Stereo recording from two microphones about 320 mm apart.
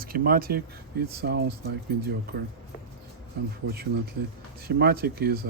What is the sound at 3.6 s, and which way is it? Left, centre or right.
Speech, right.